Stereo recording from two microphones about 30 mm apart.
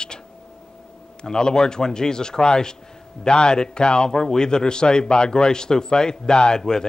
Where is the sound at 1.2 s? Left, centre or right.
Left.